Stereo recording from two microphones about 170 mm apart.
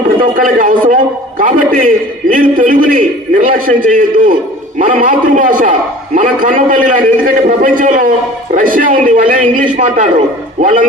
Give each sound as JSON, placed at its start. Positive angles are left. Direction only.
{"t": 0.2, "sound": "a man's voice", "side_deg": -55}